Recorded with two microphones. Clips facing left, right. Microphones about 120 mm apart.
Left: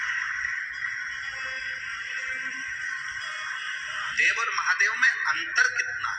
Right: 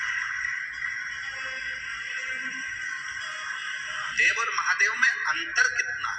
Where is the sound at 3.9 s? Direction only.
40° right (ahead or behind).